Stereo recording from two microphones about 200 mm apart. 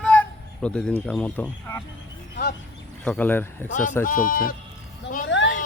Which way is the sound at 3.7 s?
40° left (ahead or behind).